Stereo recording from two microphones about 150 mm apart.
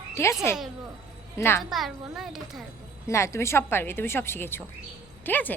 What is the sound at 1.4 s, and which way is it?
Speech, 15° left (ahead or behind).